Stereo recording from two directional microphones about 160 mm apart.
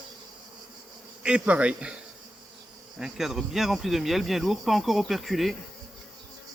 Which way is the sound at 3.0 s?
Centre (ahead or behind).